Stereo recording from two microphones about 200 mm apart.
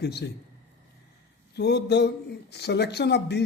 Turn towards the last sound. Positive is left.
turn(degrees=60)  # may be behind; listen again after turning